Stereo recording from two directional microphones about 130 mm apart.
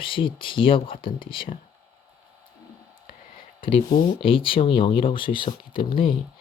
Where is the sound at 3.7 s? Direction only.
45° left (ahead or behind).